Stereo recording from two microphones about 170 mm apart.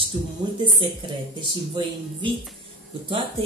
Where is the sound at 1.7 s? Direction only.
30° right (ahead or behind).